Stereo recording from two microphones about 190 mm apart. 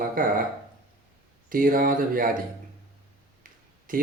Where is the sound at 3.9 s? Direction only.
45° right (ahead or behind).